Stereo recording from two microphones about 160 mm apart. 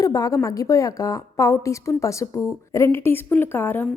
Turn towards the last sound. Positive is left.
turn(degrees=15)  # may be behind; listen again after turning